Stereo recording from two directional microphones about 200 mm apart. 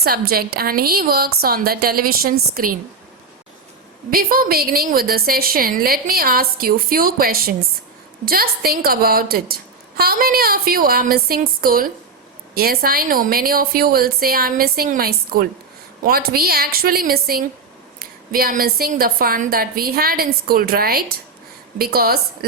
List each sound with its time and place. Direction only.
0.0 s a woman's voice: 50° right (ahead or behind)
4.1 s a woman's voice: 45° right (ahead or behind)